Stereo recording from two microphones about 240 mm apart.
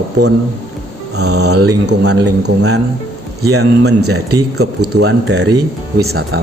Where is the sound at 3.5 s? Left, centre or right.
Right.